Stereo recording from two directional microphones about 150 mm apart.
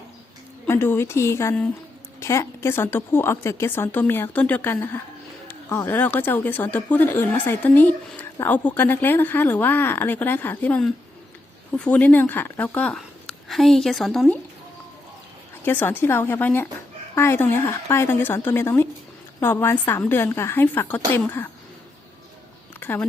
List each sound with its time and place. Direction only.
0.7 s speech: 15° left (ahead or behind); by 14.3 s centre (ahead or behind)
15.6 s speech: 15° left (ahead or behind)
22.8 s speech: 10° left (ahead or behind)